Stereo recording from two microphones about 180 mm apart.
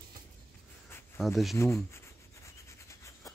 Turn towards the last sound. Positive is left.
turn(degrees=15)  # may be behind; listen again after turning